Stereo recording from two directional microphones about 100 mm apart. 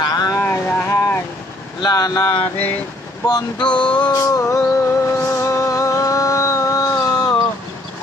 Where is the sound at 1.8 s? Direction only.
45° left (ahead or behind).